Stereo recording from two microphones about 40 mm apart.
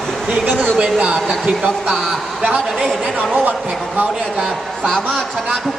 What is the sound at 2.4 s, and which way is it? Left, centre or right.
Speech, right.